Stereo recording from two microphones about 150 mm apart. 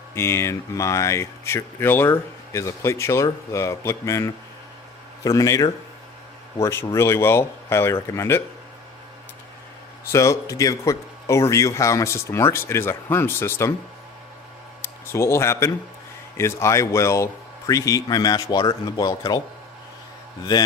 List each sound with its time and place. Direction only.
0.1 s speech: 15° left (ahead or behind)
10.1 s speech: 20° left (ahead or behind)
14.8 s speech: 15° left (ahead or behind)